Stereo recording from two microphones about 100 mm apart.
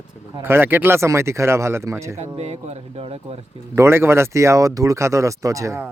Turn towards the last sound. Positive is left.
turn(degrees=-30)  # may be behind; listen again after turning